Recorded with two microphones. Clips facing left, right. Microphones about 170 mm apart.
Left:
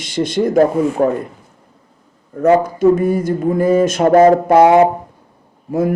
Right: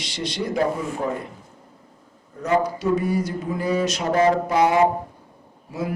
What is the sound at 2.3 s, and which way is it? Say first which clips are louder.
A man's voice: left 9 dB; 50° left (ahead or behind).